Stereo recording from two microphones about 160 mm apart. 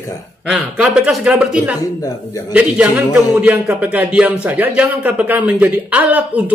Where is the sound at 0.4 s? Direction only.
5° right (ahead or behind).